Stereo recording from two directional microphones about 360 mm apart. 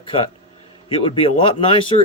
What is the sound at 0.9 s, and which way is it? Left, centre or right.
Speech, centre.